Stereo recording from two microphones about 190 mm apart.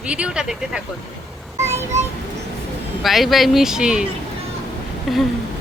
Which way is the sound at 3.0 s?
Centre (ahead or behind).